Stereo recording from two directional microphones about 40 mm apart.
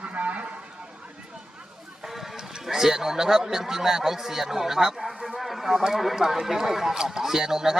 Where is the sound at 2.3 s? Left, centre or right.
Centre.